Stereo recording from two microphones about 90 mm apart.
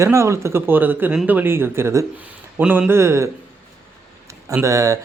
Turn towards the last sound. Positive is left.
turn(degrees=-35)  # may be behind; listen again after turning